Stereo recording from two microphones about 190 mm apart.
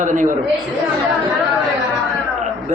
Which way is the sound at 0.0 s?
40° right (ahead or behind).